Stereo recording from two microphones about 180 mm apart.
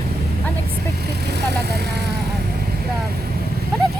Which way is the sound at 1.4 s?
65° right (ahead or behind).